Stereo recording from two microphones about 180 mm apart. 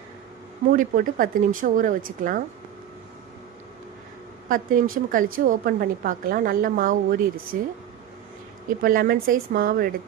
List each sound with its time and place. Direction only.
0.7 s a woman's voice: 50° right (ahead or behind)
4.4 s a woman's voice: 50° right (ahead or behind)
8.8 s a woman's voice: 55° right (ahead or behind)